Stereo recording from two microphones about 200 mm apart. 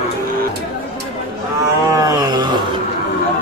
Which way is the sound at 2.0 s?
20° right (ahead or behind).